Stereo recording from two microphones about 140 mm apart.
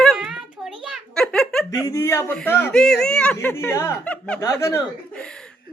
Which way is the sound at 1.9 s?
20° left (ahead or behind).